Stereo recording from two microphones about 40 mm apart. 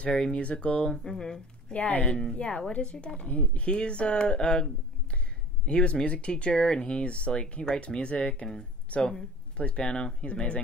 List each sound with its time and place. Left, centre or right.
0.1 s speech: centre
0.4 s speech: left
0.8 s speech: centre